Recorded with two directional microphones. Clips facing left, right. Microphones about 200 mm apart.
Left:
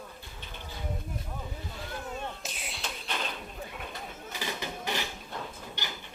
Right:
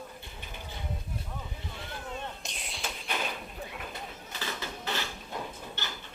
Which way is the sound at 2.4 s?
5° left (ahead or behind).